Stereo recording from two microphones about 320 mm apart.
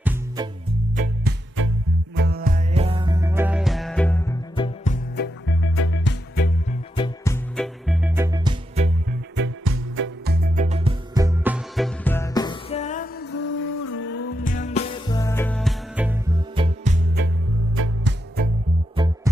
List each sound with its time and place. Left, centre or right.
0.0 s music: centre
0.9 s music: right; by 6.8 s left
7.5 s music: centre
9.4 s music: right; by 16.3 s centre
16.5 s music: centre
17.7 s music: right